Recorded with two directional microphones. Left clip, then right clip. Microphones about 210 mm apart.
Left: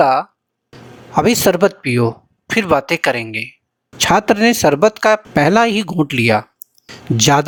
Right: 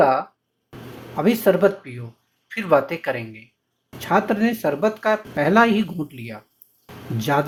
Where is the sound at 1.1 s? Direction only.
45° left (ahead or behind).